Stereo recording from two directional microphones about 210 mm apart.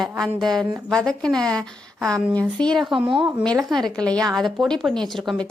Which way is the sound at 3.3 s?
Centre (ahead or behind).